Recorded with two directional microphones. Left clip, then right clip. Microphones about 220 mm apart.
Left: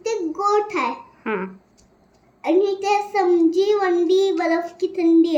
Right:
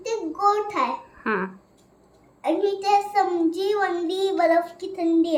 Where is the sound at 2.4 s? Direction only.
15° right (ahead or behind).